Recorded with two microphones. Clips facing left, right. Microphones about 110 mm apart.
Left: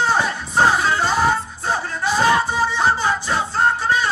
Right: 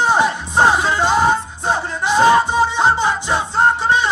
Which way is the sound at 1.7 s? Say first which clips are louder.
Right 3 dB; 20° right (ahead or behind).